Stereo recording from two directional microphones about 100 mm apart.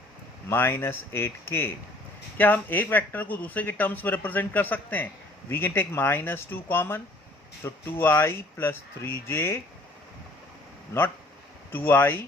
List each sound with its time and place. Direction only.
0.4 s speech: 25° left (ahead or behind)
11.7 s speech: 20° left (ahead or behind)